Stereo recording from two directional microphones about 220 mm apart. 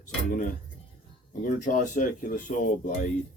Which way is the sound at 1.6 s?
35° left (ahead or behind).